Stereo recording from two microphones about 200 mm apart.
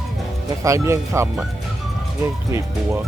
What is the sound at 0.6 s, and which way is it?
Speech, 15° right (ahead or behind).